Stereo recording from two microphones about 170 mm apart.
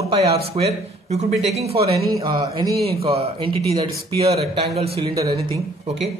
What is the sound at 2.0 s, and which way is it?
Speech, 25° right (ahead or behind).